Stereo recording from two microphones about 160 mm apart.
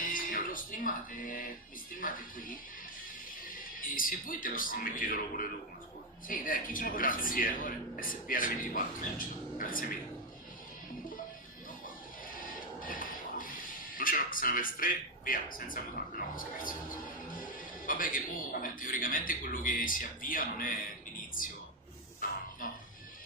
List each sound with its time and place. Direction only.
0.0 s music: 60° left (ahead or behind)
1.9 s speech: 60° left (ahead or behind)
12.4 s speech: 60° left (ahead or behind)
22.2 s music: 60° left (ahead or behind)